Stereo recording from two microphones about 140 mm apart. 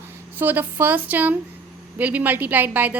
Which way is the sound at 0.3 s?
15° right (ahead or behind).